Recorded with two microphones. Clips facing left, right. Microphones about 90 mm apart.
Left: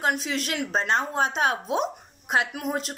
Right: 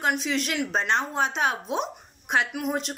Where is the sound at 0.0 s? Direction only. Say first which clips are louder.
Right 1 dB; 40° left (ahead or behind).